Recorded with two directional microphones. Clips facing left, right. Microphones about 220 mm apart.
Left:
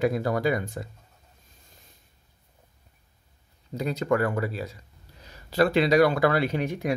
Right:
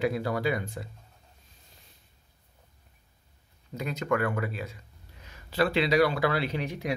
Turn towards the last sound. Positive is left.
turn(degrees=50)  # may be behind; listen again after turning